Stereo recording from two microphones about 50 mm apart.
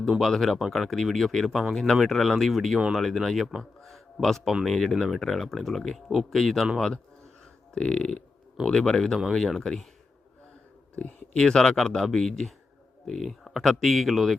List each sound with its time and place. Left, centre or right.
0.1 s speech: centre
11.3 s speech: centre